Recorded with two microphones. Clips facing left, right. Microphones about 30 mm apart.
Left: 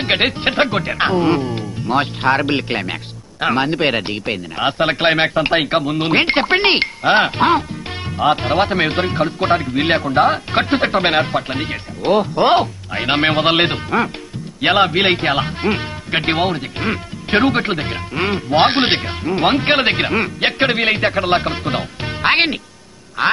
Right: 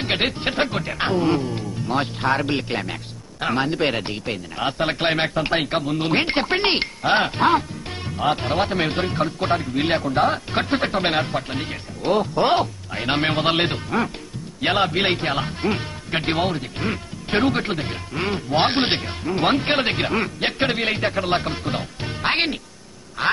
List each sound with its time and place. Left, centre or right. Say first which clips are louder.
0.0 s speech: left 6 dB; left